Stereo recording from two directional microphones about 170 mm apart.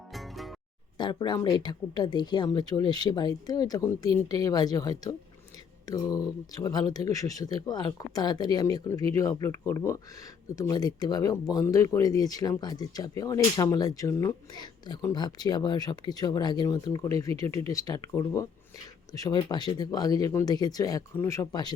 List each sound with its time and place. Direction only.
0.1 s music: centre (ahead or behind)
0.9 s speech: 25° left (ahead or behind)